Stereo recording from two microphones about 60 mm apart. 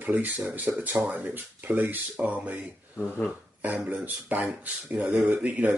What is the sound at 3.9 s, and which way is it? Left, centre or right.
Speech, right.